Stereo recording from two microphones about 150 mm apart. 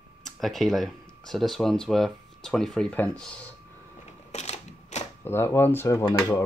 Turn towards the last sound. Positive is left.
turn(degrees=15)  # may be behind; listen again after turning